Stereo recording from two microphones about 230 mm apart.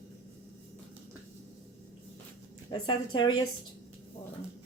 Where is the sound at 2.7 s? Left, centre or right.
Centre.